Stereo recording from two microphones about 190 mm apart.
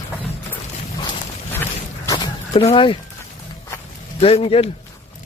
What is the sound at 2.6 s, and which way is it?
Speech, 25° left (ahead or behind).